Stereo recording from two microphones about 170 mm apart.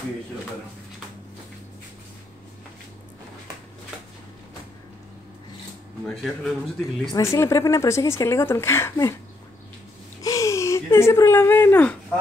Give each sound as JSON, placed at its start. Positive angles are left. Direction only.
{"t": 6.0, "sound": "a man's voice", "side_deg": 0}
{"t": 7.1, "sound": "speech", "side_deg": 20}
{"t": 10.2, "sound": "a sound", "side_deg": 20}